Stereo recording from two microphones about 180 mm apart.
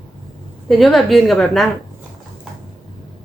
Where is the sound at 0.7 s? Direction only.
Centre (ahead or behind).